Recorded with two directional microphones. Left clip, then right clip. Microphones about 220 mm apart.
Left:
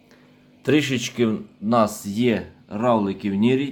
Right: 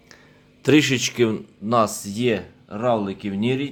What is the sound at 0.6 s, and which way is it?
Speech, 20° right (ahead or behind).